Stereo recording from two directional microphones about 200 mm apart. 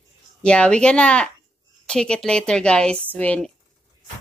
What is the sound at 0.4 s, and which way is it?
Speech, 5° left (ahead or behind).